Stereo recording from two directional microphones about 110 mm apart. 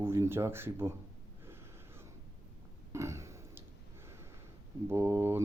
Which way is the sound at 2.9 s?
25° right (ahead or behind).